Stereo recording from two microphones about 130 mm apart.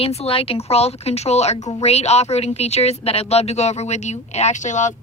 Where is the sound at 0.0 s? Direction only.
50° left (ahead or behind).